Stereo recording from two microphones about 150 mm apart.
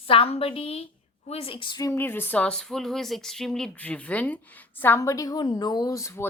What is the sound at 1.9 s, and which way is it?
A woman's voice, 15° left (ahead or behind).